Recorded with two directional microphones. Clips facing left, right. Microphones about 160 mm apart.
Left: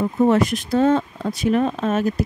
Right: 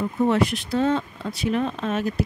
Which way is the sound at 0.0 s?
45° left (ahead or behind).